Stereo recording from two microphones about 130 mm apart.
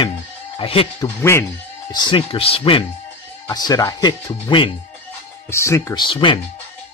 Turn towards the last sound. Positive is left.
turn(degrees=40)  # may be behind; listen again after turning